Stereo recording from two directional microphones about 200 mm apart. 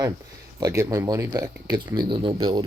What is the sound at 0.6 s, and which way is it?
Speech, 15° right (ahead or behind).